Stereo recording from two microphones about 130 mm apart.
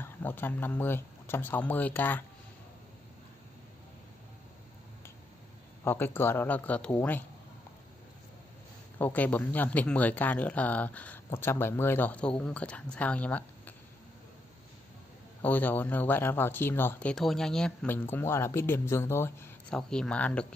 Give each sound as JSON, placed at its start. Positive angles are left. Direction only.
{"t": 0.0, "sound": "speech", "side_deg": 15}
{"t": 5.9, "sound": "speech", "side_deg": 15}
{"t": 8.9, "sound": "speech", "side_deg": 15}
{"t": 15.4, "sound": "speech", "side_deg": 15}
{"t": 17.1, "sound": "speech", "side_deg": 5}
{"t": 17.8, "sound": "speech", "side_deg": 15}
{"t": 19.7, "sound": "speech", "side_deg": 5}